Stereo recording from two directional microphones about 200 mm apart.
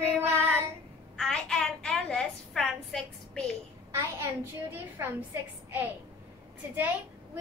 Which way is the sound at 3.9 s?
15° right (ahead or behind).